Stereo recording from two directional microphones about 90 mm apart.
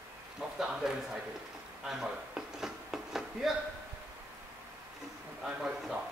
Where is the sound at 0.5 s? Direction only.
5° right (ahead or behind).